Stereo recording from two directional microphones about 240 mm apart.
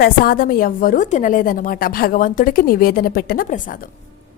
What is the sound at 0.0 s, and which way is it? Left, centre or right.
A woman's voice, left.